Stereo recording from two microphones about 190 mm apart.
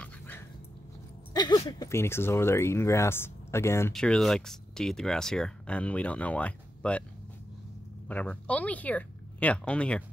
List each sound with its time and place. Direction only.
0.0 s dog: 10° left (ahead or behind)
1.3 s a sound: 20° left (ahead or behind)
1.7 s speech: 15° left (ahead or behind)
3.9 s speech: 5° left (ahead or behind)
8.1 s speech: 5° left (ahead or behind)